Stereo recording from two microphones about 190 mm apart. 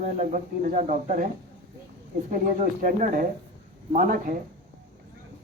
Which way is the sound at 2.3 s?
40° right (ahead or behind).